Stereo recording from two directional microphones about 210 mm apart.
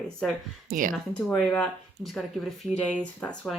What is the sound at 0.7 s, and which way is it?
Speech, 40° right (ahead or behind).